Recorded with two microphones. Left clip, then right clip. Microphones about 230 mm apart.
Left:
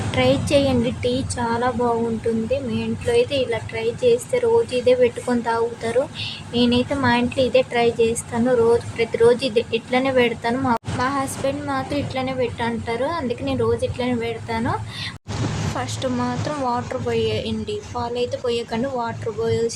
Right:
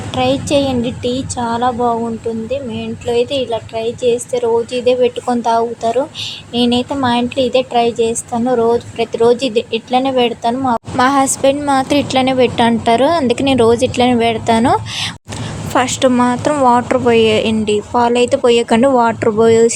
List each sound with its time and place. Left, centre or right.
0.1 s a woman's voice: centre
10.9 s a woman's voice: right